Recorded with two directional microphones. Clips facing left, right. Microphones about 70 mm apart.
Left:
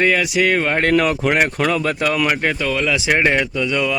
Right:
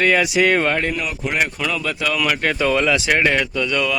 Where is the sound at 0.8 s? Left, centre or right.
Left.